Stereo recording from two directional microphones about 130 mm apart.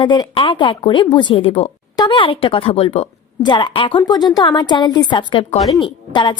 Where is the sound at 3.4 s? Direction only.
35° left (ahead or behind).